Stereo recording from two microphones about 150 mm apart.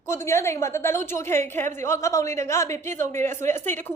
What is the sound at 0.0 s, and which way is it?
A woman's voice, 20° left (ahead or behind).